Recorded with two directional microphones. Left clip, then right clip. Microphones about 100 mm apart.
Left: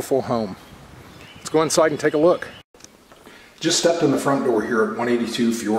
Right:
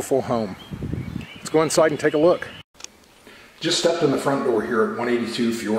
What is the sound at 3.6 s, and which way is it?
Speech, 15° left (ahead or behind).